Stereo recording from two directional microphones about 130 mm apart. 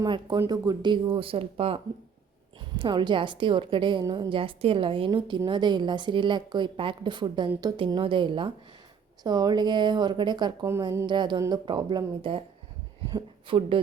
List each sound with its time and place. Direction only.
0.0 s a woman's voice: 30° right (ahead or behind)
13.6 s a woman's voice: 45° right (ahead or behind)